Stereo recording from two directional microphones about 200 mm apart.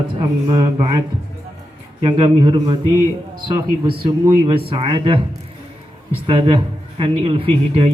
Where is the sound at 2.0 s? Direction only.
25° right (ahead or behind).